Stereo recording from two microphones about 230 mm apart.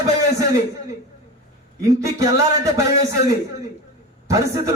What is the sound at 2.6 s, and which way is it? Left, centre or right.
Speech, centre.